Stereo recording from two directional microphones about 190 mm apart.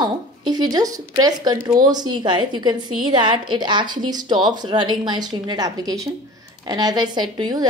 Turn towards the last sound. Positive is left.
turn(degrees=-20)  # may be behind; listen again after turning